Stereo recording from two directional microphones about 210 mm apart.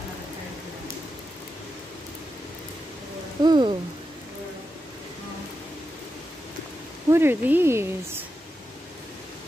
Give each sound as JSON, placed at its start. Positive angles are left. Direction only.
{"t": 3.4, "sound": "rain", "side_deg": -20}
{"t": 7.1, "sound": "speech", "side_deg": -10}